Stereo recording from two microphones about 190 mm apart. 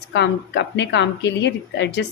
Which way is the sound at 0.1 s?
65° left (ahead or behind).